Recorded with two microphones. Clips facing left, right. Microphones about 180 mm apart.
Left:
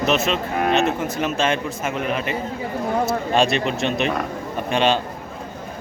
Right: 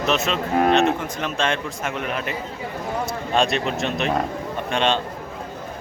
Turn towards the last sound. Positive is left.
turn(degrees=5)  # may be behind; listen again after turning